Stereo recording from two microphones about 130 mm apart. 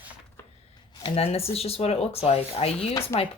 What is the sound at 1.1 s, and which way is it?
Speech, 50° left (ahead or behind).